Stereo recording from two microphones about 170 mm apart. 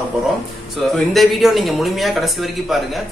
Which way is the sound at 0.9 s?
Centre (ahead or behind).